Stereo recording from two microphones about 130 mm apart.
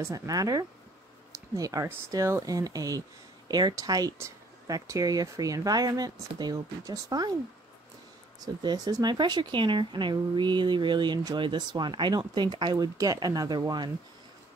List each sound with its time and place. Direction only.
0.0 s speech: 25° right (ahead or behind)
8.4 s speech: 30° right (ahead or behind)